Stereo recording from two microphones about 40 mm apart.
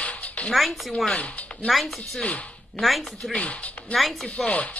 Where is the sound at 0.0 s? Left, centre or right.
Left.